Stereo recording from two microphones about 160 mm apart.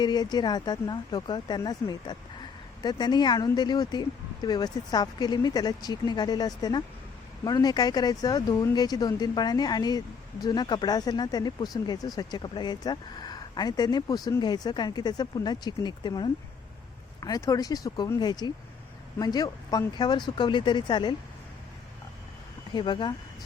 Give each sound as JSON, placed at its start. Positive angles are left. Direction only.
{"t": 0.0, "sound": "speech", "side_deg": 25}
{"t": 22.7, "sound": "speech", "side_deg": 30}